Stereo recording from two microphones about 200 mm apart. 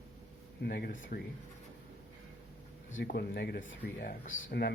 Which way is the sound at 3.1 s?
50° left (ahead or behind).